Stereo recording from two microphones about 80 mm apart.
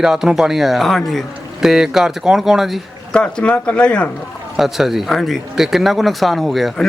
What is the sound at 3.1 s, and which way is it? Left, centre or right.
Speech, centre.